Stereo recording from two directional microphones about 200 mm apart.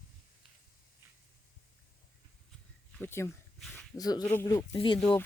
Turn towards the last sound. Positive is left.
turn(degrees=5)  # may be behind; listen again after turning